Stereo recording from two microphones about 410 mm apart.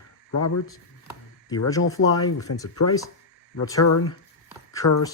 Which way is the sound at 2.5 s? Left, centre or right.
Left.